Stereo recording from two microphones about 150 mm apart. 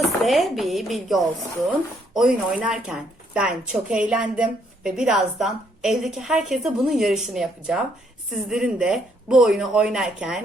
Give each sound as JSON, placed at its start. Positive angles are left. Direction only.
{"t": 0.0, "sound": "a woman's voice", "side_deg": 0}